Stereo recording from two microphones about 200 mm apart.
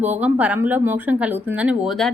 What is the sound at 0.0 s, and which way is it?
A woman's voice, 10° right (ahead or behind).